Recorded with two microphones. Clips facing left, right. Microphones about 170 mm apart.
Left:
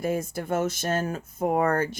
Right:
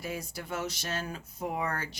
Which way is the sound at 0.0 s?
50° left (ahead or behind).